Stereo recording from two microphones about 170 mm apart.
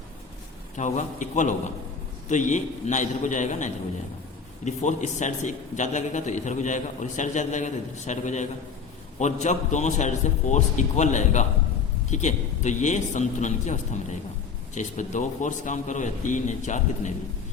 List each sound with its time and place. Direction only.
0.8 s a man's voice: 45° left (ahead or behind)